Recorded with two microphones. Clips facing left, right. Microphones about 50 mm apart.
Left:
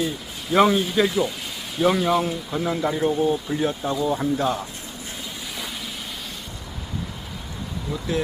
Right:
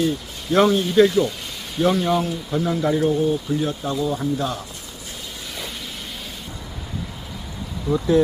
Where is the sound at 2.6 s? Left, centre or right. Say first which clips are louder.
Right 2 dB; centre.